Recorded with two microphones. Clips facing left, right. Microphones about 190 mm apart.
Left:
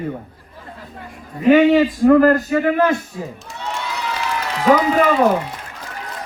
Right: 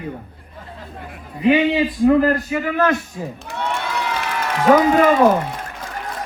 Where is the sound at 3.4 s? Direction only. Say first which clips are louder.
Right 3 dB; 60° right (ahead or behind).